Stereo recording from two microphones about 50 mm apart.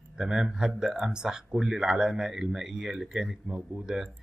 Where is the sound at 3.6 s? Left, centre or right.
Right.